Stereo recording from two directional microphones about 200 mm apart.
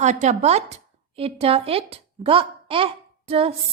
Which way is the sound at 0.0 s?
35° right (ahead or behind).